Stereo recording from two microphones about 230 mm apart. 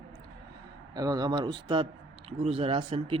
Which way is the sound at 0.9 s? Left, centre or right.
Centre.